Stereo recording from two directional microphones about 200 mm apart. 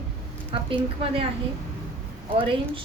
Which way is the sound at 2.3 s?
25° right (ahead or behind).